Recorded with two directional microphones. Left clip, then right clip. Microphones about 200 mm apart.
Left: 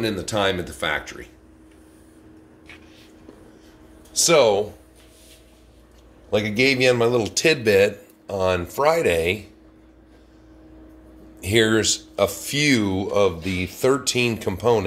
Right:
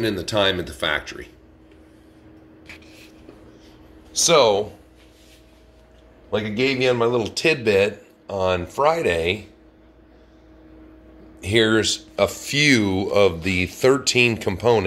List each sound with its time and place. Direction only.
0.0 s a man's voice: 10° left (ahead or behind)
4.1 s a man's voice: 10° left (ahead or behind)
6.3 s a man's voice: 25° left (ahead or behind)
11.3 s speech: 10° left (ahead or behind); by 14.8 s 5° right (ahead or behind)